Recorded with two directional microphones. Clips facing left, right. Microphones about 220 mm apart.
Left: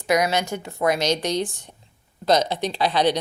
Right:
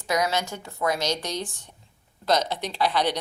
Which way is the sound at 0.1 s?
15° left (ahead or behind).